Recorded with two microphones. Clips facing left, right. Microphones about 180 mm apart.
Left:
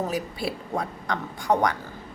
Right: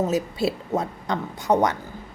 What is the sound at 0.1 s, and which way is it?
A woman's voice, 25° right (ahead or behind).